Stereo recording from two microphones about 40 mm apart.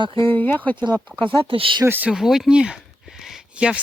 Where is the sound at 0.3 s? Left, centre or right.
Left.